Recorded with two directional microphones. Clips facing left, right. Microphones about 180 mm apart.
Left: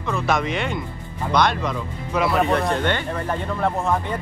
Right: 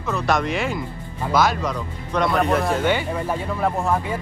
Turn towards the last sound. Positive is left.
turn(degrees=-5)  # may be behind; listen again after turning